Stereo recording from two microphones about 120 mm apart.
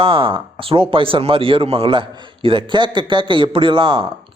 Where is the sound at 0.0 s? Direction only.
50° right (ahead or behind).